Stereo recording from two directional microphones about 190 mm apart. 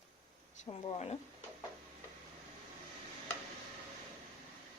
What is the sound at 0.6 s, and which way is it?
Speech, 35° left (ahead or behind).